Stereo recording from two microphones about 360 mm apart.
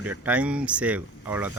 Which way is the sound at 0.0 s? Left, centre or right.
Centre.